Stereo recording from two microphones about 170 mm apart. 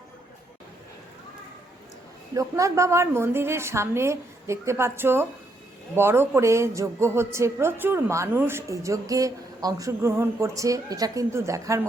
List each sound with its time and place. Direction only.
2.3 s speech: 20° right (ahead or behind)